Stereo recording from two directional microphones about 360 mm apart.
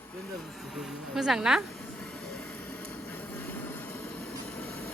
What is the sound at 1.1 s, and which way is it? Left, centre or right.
Speech, centre.